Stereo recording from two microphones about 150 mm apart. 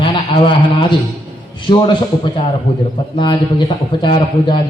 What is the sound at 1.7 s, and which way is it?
A man's voice, 30° left (ahead or behind).